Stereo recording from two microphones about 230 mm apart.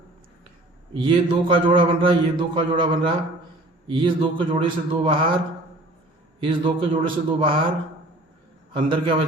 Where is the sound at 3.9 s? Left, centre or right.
Right.